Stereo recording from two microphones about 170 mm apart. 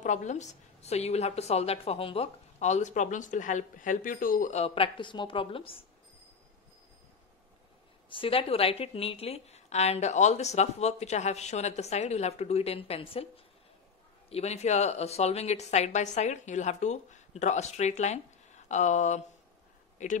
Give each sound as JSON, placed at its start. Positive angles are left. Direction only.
{"t": 0.0, "sound": "a woman's voice", "side_deg": 45}
{"t": 8.1, "sound": "a woman's voice", "side_deg": 30}
{"t": 14.3, "sound": "a woman's voice", "side_deg": 40}